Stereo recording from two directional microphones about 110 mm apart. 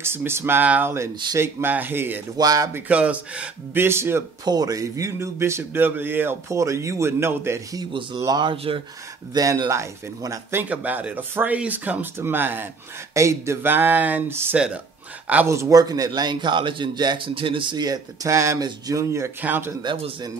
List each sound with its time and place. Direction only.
0.0 s a man's voice: 20° right (ahead or behind)
2.3 s a man's voice: 35° right (ahead or behind)
2.7 s a man's voice: 10° right (ahead or behind)
4.5 s a man's voice: 35° right (ahead or behind)
8.2 s a man's voice: 40° right (ahead or behind)
10.6 s a man's voice: 15° right (ahead or behind)
19.4 s speech: 15° right (ahead or behind)